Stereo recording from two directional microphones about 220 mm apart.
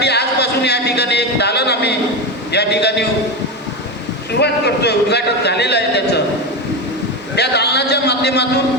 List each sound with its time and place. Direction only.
0.0 s a sound: 50° left (ahead or behind)
2.5 s a man's voice: 50° left (ahead or behind)
4.3 s a man's voice: 50° left (ahead or behind)
7.3 s a man's voice: 50° left (ahead or behind)